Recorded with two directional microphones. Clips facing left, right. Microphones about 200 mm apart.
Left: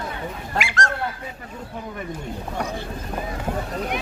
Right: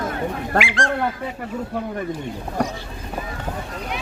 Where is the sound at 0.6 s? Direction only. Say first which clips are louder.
Right 3 dB; 45° left (ahead or behind).